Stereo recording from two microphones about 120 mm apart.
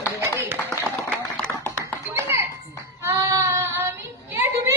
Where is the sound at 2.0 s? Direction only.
25° right (ahead or behind).